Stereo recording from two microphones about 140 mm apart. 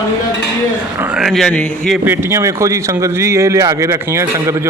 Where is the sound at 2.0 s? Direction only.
15° right (ahead or behind).